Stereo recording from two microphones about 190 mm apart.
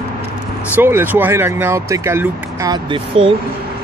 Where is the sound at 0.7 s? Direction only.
10° right (ahead or behind); by 3.3 s 25° right (ahead or behind).